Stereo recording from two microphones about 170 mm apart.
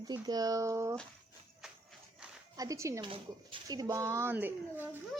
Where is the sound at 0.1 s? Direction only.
20° right (ahead or behind).